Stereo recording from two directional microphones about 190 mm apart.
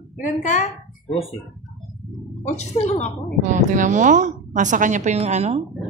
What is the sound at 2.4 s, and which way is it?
Speech, 35° left (ahead or behind).